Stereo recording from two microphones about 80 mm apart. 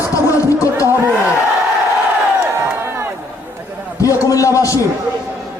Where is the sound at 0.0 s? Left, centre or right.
Left.